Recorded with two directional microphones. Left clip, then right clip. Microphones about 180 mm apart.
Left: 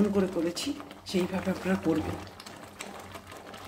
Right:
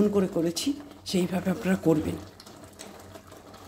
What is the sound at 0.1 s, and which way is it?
Speech, 50° right (ahead or behind).